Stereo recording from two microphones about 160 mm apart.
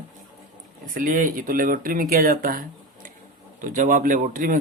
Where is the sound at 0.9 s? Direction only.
60° right (ahead or behind).